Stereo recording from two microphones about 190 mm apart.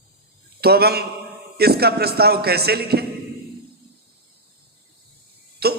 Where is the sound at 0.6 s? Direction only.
55° right (ahead or behind).